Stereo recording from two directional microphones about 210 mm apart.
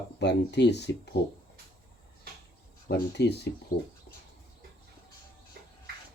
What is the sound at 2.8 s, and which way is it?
Speech, 55° left (ahead or behind).